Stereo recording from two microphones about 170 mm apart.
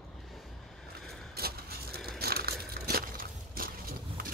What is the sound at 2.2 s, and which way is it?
Crushing, 65° right (ahead or behind).